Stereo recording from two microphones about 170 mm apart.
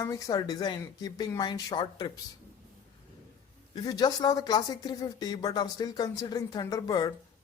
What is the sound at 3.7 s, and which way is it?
Speech, 25° left (ahead or behind).